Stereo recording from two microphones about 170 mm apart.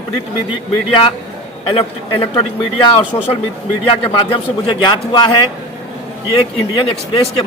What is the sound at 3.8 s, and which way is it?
A man's voice, 35° left (ahead or behind).